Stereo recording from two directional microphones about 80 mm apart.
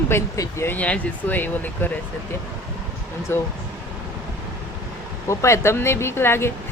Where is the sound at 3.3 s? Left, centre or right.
Left.